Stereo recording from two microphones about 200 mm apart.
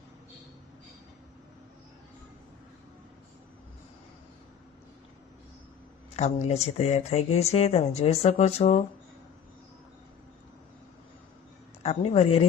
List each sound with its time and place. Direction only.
6.1 s speech: 35° left (ahead or behind)
11.8 s speech: 30° left (ahead or behind)